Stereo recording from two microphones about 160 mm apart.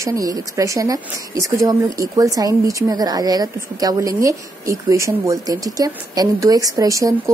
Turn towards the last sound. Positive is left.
turn(degrees=-20)  # may be behind; listen again after turning